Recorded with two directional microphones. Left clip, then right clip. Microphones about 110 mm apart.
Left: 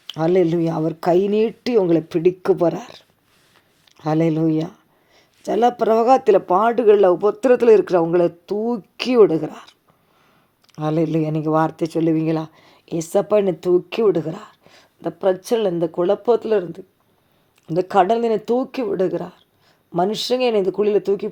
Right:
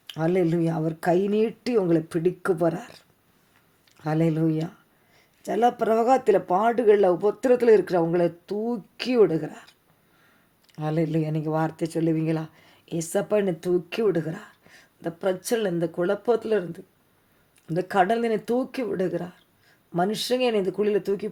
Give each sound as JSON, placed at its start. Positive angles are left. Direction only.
{"t": 0.1, "sound": "speech", "side_deg": 35}